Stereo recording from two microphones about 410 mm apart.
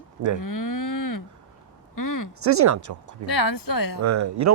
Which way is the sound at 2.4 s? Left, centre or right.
Right.